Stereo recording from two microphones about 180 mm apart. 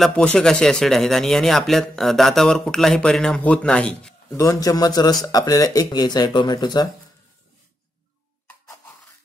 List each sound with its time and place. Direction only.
0.0 s speech: 5° left (ahead or behind)
4.3 s speech: 15° left (ahead or behind)